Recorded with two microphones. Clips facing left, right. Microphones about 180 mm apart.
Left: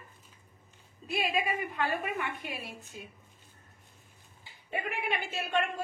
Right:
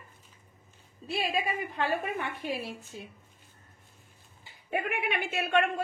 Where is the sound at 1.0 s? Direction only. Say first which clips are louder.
Even; 35° right (ahead or behind).